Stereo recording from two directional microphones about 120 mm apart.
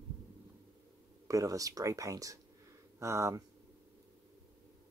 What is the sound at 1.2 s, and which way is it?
Speech, 30° right (ahead or behind).